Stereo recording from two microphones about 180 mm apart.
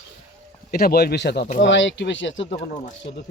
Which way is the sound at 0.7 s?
55° left (ahead or behind).